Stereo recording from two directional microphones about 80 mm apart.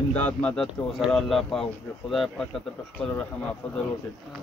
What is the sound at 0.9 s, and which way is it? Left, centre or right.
Speech, centre.